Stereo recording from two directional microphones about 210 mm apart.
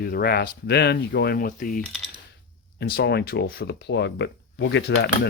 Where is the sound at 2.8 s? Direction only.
50° left (ahead or behind).